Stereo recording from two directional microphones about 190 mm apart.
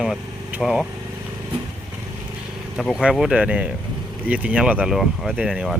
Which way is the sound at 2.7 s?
Centre (ahead or behind).